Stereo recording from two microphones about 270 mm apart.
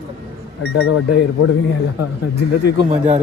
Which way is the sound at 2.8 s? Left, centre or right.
Centre.